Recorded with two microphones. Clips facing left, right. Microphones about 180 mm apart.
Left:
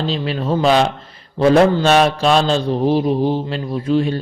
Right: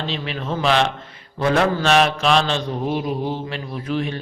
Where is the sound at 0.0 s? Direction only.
35° left (ahead or behind).